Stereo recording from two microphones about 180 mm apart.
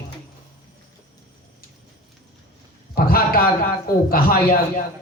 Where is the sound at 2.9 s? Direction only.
55° left (ahead or behind).